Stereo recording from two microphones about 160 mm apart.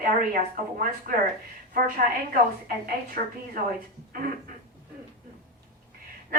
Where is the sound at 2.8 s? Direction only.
65° right (ahead or behind).